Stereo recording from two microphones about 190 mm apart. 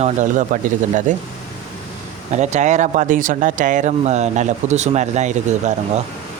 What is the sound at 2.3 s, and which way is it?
Speech, 35° right (ahead or behind).